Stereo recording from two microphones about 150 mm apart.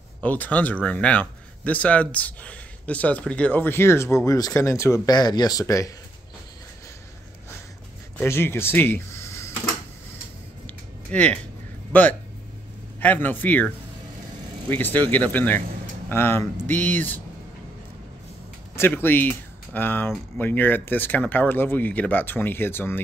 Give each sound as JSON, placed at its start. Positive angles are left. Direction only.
{"t": 0.2, "sound": "speech", "side_deg": 10}
{"t": 8.2, "sound": "speech", "side_deg": 15}
{"t": 10.7, "sound": "a sound", "side_deg": 10}
{"t": 11.9, "sound": "speech", "side_deg": 10}
{"t": 14.7, "sound": "speech", "side_deg": 10}
{"t": 18.8, "sound": "speech", "side_deg": 15}